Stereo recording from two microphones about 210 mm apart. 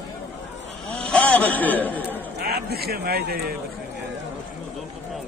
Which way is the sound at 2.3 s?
50° right (ahead or behind).